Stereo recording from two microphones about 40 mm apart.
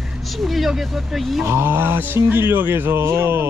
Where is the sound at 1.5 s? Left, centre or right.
Right.